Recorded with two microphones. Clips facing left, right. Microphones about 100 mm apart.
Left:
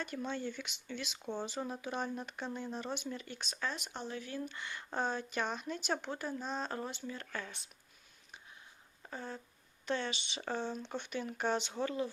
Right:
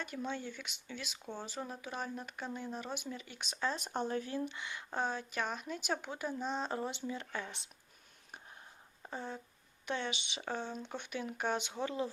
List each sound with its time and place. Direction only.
0.0 s speech: 5° right (ahead or behind)
3.4 s speech: 20° right (ahead or behind)
3.7 s speech: 40° right (ahead or behind)
4.3 s speech: 25° right (ahead or behind)
4.5 s speech: 10° right (ahead or behind)
9.0 s speech: 15° right (ahead or behind)